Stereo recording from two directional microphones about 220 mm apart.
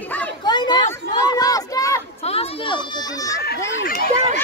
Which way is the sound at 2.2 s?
25° left (ahead or behind).